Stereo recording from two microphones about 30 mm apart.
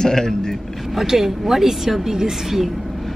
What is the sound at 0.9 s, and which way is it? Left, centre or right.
A woman's voice, centre.